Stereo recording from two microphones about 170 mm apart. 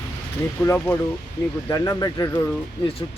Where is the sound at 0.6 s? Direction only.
15° left (ahead or behind).